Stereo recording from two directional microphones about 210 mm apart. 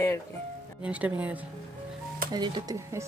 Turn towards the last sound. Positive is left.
turn(degrees=-15)  # may be behind; listen again after turning